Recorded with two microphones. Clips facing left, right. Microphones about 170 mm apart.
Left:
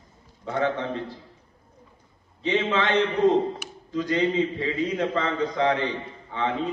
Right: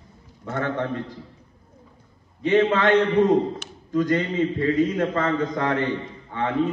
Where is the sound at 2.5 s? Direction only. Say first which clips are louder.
Right 5 dB; 50° right (ahead or behind).